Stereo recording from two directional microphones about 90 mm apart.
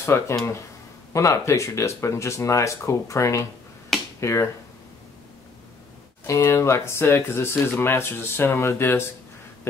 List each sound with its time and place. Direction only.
0.0 s speech: 30° left (ahead or behind)
6.2 s speech: 30° left (ahead or behind)